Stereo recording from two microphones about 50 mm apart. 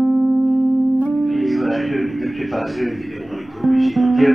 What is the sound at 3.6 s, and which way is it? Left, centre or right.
Music, centre.